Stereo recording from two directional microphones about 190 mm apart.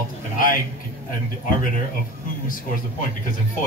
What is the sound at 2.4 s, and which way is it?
Speech, 45° left (ahead or behind).